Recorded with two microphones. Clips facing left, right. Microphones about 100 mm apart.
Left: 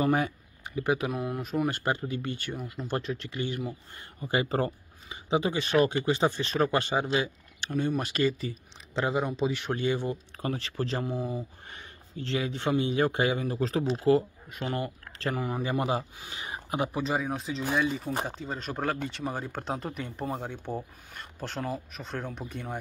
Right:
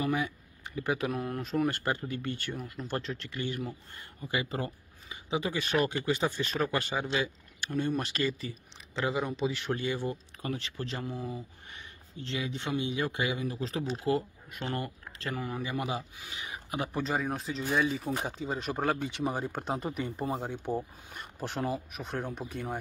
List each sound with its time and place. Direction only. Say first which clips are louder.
0.7 s speech: left 3 dB; 20° left (ahead or behind)
1.1 s speech: left 1 dB; 5° left (ahead or behind)
4.3 s speech: left 6 dB; 40° left (ahead or behind)
5.1 s speech: left 5 dB; 25° left (ahead or behind)
10.4 s speech: left 4 dB; 35° left (ahead or behind)
12.2 s speech: left 5 dB; 25° right (ahead or behind)
12.5 s speech: left 6 dB; 40° left (ahead or behind)
14.0 s speech: left 7 dB; 30° left (ahead or behind)
14.6 s speech: left 3 dB; 15° left (ahead or behind)
15.2 s speech: left 5 dB; 25° left (ahead or behind)
16.9 s speech: left 2 dB; centre (ahead or behind)